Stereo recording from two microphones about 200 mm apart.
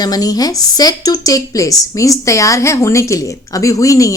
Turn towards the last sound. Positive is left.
turn(degrees=15)  # may be behind; listen again after turning